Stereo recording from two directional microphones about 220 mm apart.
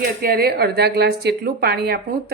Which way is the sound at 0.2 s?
45° right (ahead or behind).